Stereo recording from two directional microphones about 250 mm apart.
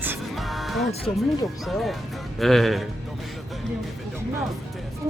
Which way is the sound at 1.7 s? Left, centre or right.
Centre.